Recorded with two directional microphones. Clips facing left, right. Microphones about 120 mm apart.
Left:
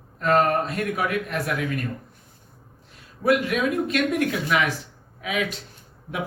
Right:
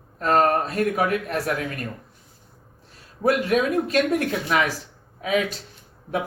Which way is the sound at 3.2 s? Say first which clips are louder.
Right 1 dB; 35° right (ahead or behind).